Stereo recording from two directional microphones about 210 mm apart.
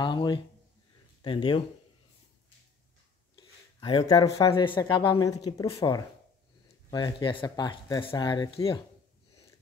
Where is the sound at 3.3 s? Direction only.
20° left (ahead or behind).